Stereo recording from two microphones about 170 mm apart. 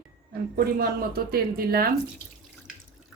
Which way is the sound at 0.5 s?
65° right (ahead or behind).